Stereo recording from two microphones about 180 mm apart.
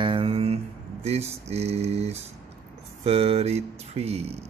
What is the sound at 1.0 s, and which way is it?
Speech, 35° right (ahead or behind).